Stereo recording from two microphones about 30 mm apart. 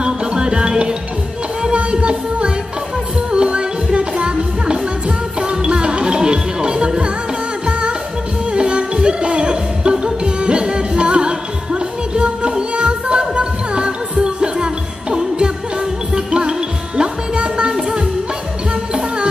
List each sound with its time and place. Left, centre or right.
0.0 s music: right
6.0 s music: right
8.5 s music: right
9.5 s music: right